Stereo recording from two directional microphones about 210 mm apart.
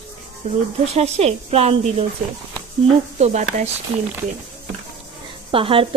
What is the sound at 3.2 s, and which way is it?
Speech, 30° right (ahead or behind).